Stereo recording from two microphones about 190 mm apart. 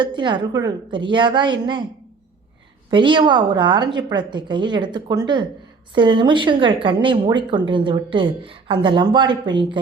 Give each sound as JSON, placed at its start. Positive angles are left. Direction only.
{"t": 0.0, "sound": "a woman's voice", "side_deg": -25}
{"t": 2.9, "sound": "a woman's voice", "side_deg": -25}